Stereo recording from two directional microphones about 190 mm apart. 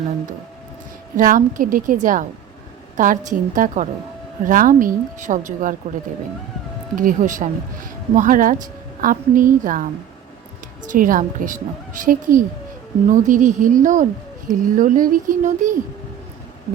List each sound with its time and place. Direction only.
1.1 s a woman's voice: 45° right (ahead or behind)
6.9 s a woman's voice: 45° right (ahead or behind)
10.8 s a woman's voice: 45° right (ahead or behind)